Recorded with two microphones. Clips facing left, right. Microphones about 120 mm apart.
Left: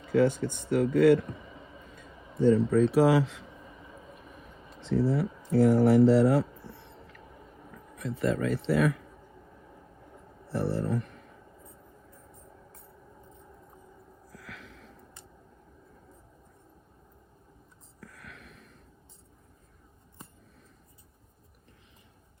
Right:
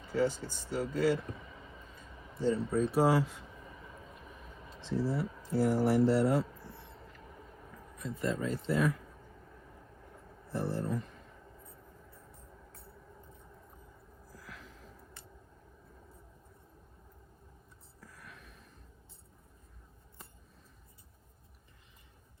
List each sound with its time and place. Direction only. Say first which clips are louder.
0.1 s speech: left 7 dB; 65° left (ahead or behind)
2.4 s speech: left 8 dB; 65° left (ahead or behind); by 3.4 s 85° left
4.8 s speech: left 6 dB; 60° left (ahead or behind)
7.9 s speech: left 6 dB; 65° left (ahead or behind)
10.5 s speech: left 5 dB; 70° left (ahead or behind)
14.3 s a sound: left 4 dB; 75° left (ahead or behind)
18.0 s a sound: left 5 dB; 65° left (ahead or behind)